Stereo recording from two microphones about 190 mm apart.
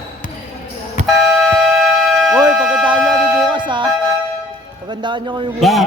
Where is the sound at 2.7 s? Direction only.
5° right (ahead or behind).